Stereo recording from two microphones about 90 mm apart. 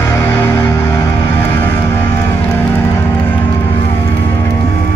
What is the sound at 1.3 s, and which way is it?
Vehicle, 25° left (ahead or behind).